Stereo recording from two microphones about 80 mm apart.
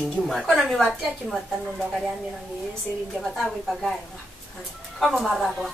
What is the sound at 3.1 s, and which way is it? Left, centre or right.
Speech, centre.